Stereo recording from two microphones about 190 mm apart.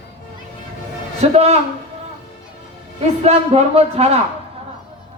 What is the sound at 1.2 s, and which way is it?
Speech, 30° right (ahead or behind).